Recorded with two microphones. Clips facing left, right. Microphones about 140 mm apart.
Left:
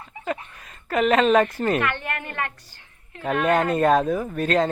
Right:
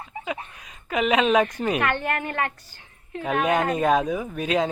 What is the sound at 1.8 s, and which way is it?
Speech, 35° right (ahead or behind).